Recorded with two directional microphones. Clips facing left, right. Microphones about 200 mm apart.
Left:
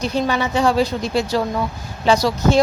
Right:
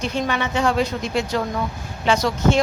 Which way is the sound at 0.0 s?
35° left (ahead or behind).